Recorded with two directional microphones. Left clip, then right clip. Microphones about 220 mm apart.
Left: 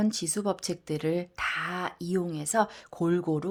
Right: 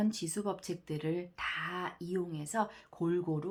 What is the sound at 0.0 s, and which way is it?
Speech, 40° left (ahead or behind).